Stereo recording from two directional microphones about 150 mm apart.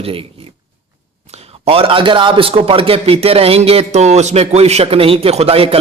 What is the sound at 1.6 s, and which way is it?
A man's voice, 40° right (ahead or behind).